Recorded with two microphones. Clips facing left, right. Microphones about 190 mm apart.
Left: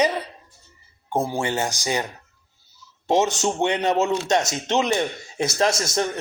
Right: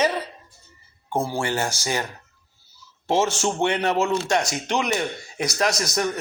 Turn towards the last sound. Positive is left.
turn(degrees=25)  # may be behind; listen again after turning